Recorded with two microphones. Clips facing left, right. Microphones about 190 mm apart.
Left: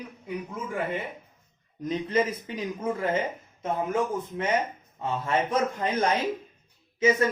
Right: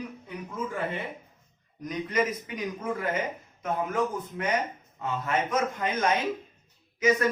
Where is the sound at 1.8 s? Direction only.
30° left (ahead or behind).